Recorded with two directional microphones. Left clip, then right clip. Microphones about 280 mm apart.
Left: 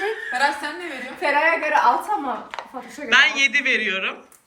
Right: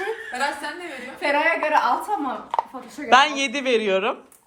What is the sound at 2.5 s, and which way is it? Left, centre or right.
Speech, centre.